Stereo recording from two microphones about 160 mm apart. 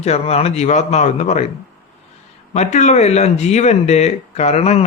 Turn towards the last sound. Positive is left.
turn(degrees=40)  # may be behind; listen again after turning